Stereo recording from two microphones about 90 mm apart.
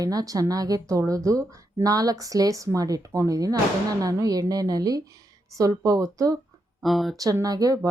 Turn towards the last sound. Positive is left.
turn(degrees=-45)  # may be behind; listen again after turning